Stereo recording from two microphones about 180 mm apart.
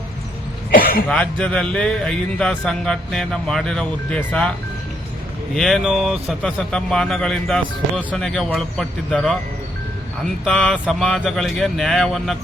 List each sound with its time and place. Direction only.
0.7 s cough: 55° left (ahead or behind)
1.1 s speech: 5° left (ahead or behind)
5.5 s speech: centre (ahead or behind)
10.4 s speech: centre (ahead or behind)